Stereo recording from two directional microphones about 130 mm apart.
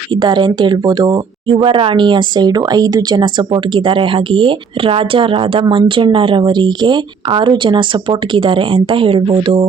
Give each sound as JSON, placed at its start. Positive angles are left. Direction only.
{"t": 0.1, "sound": "speech", "side_deg": -35}